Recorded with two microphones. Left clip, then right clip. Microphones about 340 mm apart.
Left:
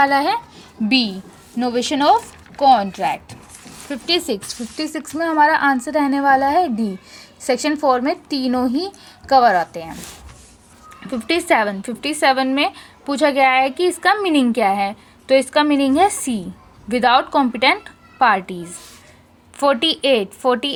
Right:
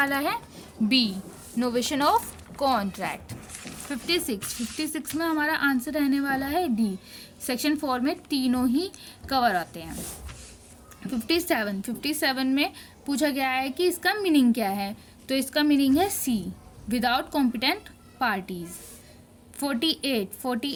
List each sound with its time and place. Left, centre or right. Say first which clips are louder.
0.0 s a woman's voice: left 10 dB; right
11.3 s a woman's voice: left 9 dB; right
19.5 s a woman's voice: left 11 dB; right